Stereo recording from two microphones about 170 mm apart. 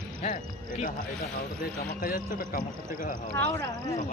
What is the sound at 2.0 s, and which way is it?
Speech, 55° left (ahead or behind).